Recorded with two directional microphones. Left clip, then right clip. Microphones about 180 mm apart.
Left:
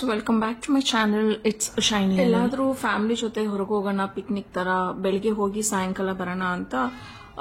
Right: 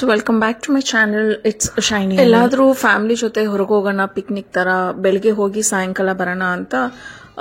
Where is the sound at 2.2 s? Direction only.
45° right (ahead or behind); by 6.9 s 30° right (ahead or behind).